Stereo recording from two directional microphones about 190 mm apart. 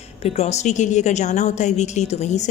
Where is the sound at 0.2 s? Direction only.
35° left (ahead or behind).